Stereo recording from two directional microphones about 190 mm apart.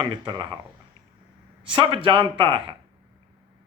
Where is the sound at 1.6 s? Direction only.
25° right (ahead or behind).